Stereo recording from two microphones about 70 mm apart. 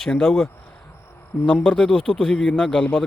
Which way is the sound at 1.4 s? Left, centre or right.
Centre.